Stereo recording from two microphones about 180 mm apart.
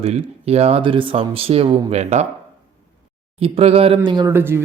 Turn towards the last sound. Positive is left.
turn(degrees=-15)  # may be behind; listen again after turning